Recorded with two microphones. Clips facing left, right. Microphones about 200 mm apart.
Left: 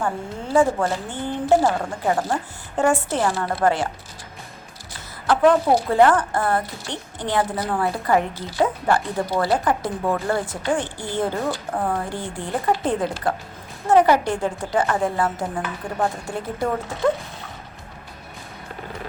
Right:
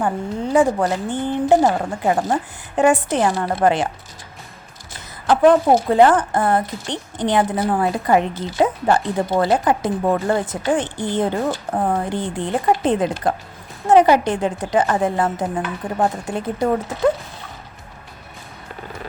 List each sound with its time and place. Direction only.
0.0 s speech: 15° right (ahead or behind)
5.2 s speech: 20° right (ahead or behind)